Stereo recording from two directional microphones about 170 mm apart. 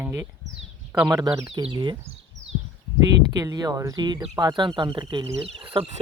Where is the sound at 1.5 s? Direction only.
30° right (ahead or behind).